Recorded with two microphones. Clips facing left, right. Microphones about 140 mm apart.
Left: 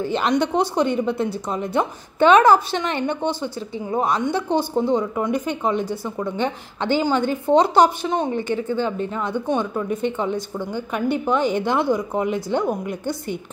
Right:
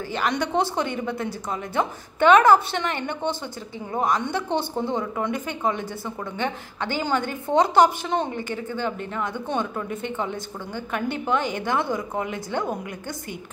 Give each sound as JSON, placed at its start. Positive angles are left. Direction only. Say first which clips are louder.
{"t": 0.0, "sound": "a woman's voice", "louder": "left 5 dB", "side_deg": 20}